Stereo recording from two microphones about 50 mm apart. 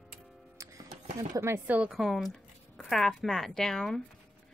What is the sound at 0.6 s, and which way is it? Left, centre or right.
Music, right.